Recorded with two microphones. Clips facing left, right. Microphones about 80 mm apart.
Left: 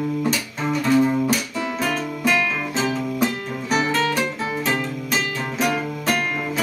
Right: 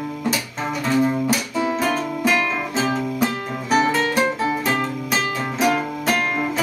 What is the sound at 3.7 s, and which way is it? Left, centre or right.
Music, right.